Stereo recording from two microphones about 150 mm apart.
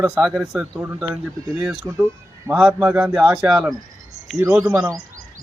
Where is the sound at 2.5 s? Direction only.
5° right (ahead or behind).